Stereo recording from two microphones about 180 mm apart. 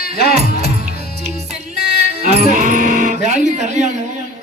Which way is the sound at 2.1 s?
40° right (ahead or behind).